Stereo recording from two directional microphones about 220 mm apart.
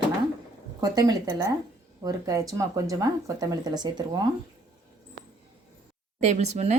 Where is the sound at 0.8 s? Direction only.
15° right (ahead or behind).